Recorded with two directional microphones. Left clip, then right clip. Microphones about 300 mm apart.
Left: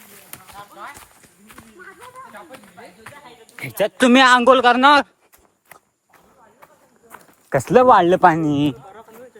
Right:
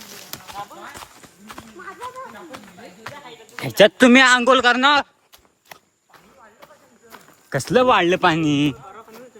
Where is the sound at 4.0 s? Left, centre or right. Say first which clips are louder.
Even; centre.